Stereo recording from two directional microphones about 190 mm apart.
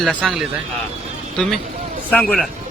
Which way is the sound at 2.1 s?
5° left (ahead or behind).